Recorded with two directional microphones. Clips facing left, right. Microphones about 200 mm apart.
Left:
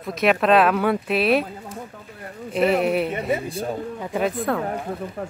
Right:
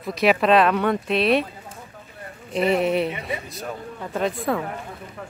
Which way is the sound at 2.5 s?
Centre (ahead or behind).